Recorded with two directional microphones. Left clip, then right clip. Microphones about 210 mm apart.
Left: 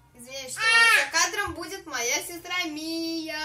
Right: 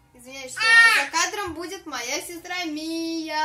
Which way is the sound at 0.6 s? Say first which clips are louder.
Right 4 dB; 20° right (ahead or behind).